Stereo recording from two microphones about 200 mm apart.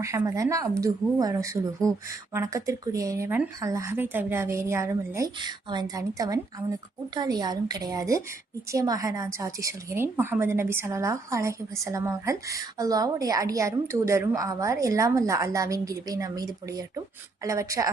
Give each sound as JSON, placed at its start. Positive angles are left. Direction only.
{"t": 0.0, "sound": "a woman's voice", "side_deg": -15}